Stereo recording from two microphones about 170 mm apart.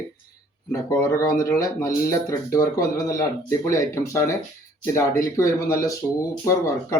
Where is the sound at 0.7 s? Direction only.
20° left (ahead or behind).